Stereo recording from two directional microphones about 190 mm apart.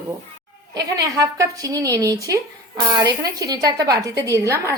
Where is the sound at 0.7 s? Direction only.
20° right (ahead or behind).